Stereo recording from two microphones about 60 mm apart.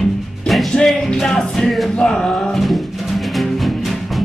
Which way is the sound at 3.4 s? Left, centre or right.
Centre.